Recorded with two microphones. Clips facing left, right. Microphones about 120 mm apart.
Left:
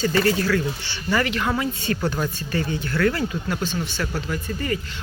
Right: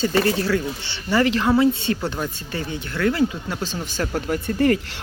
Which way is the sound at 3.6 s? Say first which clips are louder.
Even; 35° right (ahead or behind).